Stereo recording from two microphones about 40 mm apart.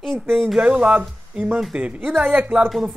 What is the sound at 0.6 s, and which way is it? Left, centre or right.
Speech, right.